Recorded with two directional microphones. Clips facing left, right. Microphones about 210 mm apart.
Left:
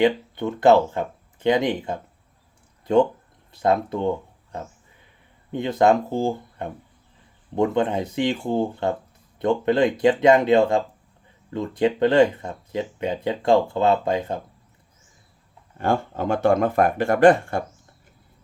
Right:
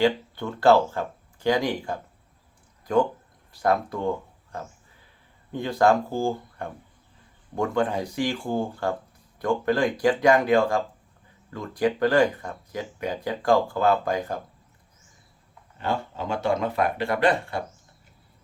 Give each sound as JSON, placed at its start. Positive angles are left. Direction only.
{"t": 0.0, "sound": "speech", "side_deg": 20}
{"t": 5.5, "sound": "speech", "side_deg": 20}
{"t": 15.8, "sound": "speech", "side_deg": 50}